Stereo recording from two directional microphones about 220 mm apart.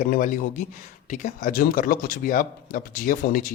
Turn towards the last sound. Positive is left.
turn(degrees=40)  # may be behind; listen again after turning